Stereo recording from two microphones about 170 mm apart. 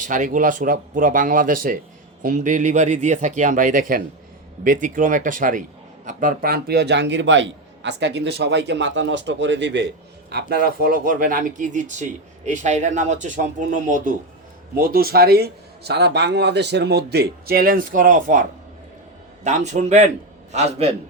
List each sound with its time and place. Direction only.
0.0 s a man's voice: 50° right (ahead or behind); by 10.4 s 80° right
10.5 s speech: 60° right (ahead or behind)
14.8 s a man's voice: 60° right (ahead or behind)
19.5 s a man's voice: 40° right (ahead or behind)